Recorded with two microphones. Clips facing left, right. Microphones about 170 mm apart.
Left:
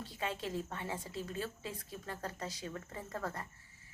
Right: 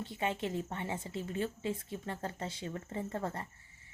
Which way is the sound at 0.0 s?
20° right (ahead or behind).